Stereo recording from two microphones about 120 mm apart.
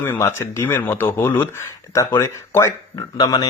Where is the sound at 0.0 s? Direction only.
20° left (ahead or behind).